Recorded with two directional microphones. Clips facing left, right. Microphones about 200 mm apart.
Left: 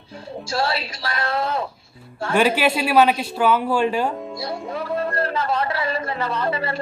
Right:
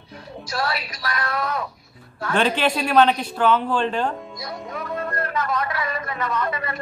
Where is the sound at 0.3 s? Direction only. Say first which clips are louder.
Left 3 dB; 30° left (ahead or behind).